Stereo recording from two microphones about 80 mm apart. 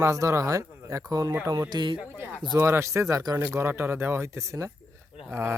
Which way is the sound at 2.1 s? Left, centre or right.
Right.